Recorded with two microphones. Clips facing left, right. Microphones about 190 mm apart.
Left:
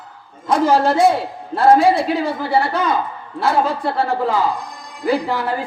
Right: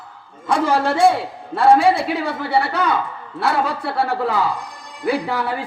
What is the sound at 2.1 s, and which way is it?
A man's voice, 70° right (ahead or behind).